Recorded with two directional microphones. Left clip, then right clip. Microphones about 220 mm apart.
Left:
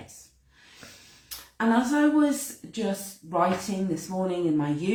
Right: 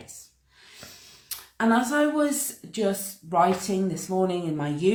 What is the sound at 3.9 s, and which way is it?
Speech, 45° right (ahead or behind).